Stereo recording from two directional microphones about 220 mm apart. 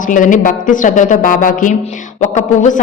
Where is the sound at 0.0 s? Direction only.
35° left (ahead or behind).